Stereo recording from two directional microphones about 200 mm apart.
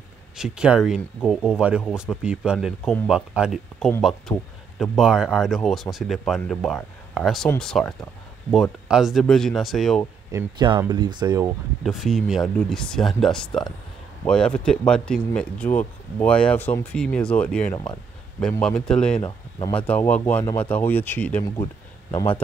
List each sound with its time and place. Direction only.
0.4 s a man's voice: 5° right (ahead or behind)
10.3 s speech: 20° right (ahead or behind)
11.8 s speech: centre (ahead or behind)
22.1 s speech: 25° left (ahead or behind)